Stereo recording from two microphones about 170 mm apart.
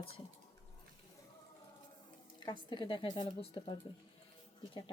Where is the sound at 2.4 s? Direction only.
25° left (ahead or behind).